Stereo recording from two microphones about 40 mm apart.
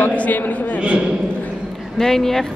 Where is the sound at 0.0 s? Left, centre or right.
Left.